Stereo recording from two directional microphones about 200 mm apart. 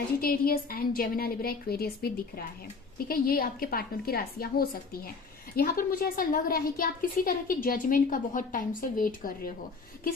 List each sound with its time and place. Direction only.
0.2 s a woman's voice: 45° left (ahead or behind)